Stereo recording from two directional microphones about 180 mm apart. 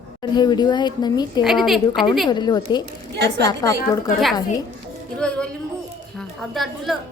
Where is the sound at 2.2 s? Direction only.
25° left (ahead or behind).